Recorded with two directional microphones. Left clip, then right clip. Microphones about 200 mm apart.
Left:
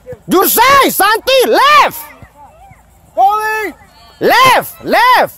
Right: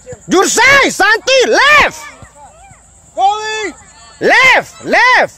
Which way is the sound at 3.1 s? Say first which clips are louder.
Left 2 dB; 35° left (ahead or behind).